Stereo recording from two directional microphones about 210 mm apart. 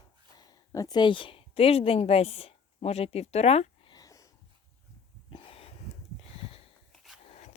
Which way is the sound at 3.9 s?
15° left (ahead or behind).